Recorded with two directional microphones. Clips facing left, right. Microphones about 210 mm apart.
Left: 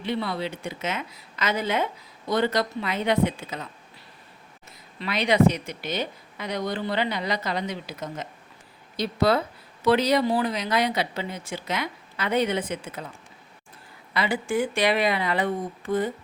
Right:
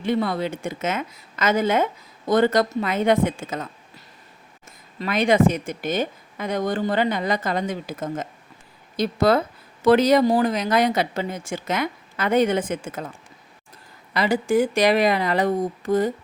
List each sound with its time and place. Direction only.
0.0 s a woman's voice: 45° right (ahead or behind)
4.9 s a woman's voice: 45° right (ahead or behind)
14.1 s speech: 40° right (ahead or behind)